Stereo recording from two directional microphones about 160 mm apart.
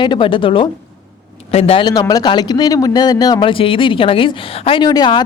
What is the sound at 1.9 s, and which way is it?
Speech, 25° left (ahead or behind).